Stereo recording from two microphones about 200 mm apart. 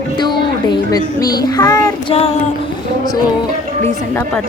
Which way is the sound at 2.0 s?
30° left (ahead or behind).